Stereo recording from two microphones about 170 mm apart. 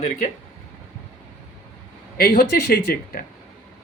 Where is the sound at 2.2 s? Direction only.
60° left (ahead or behind).